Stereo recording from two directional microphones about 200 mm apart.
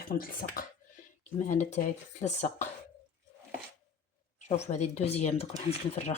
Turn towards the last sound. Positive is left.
turn(degrees=35)  # may be behind; listen again after turning